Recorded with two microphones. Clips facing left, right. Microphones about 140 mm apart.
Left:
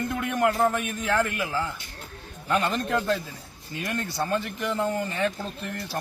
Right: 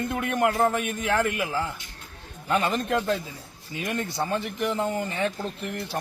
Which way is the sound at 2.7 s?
15° right (ahead or behind).